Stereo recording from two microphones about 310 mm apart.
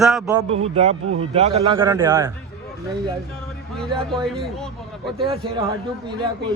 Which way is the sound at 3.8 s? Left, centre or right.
Centre.